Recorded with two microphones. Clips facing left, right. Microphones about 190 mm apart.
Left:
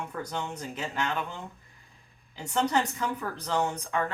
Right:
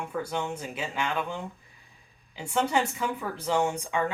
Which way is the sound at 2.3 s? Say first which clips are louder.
Right 1 dB; 10° right (ahead or behind).